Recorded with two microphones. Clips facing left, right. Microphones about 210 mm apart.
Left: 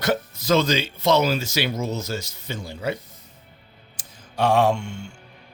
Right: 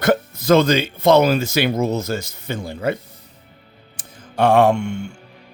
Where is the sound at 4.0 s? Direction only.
55° right (ahead or behind).